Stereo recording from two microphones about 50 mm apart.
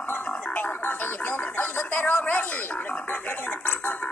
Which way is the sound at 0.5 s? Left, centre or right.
Left.